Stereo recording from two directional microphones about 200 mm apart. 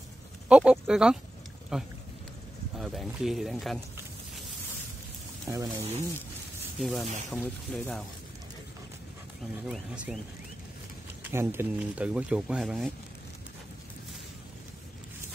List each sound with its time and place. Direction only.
0.5 s speech: 5° right (ahead or behind)
5.5 s speech: 15° right (ahead or behind)
6.8 s speech: centre (ahead or behind)
9.7 s speech: 5° right (ahead or behind)
11.2 s speech: 10° right (ahead or behind)